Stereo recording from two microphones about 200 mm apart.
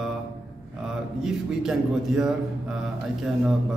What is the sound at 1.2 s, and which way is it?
Speech, centre (ahead or behind).